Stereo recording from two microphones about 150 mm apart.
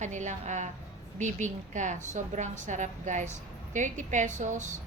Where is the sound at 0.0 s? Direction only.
55° right (ahead or behind).